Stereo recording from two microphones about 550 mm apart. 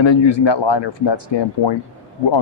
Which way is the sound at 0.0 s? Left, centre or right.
Left.